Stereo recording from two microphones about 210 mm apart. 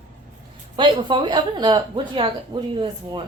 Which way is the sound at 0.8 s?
20° right (ahead or behind).